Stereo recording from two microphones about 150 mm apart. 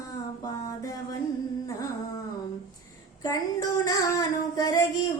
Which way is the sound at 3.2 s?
25° left (ahead or behind).